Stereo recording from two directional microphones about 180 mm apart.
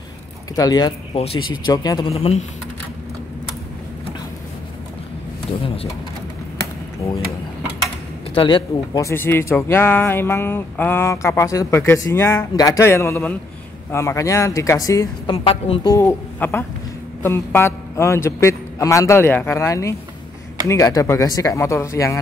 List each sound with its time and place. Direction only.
0.6 s speech: 20° left (ahead or behind)
1.1 s speech: 35° left (ahead or behind)
1.7 s speech: 20° left (ahead or behind)
2.1 s speech: 35° left (ahead or behind)
8.4 s speech: 25° left (ahead or behind)
15.3 s speech: 30° left (ahead or behind)
15.9 s speech: 15° left (ahead or behind)